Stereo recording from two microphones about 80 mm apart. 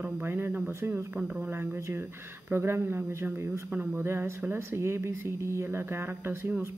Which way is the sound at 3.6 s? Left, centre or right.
Right.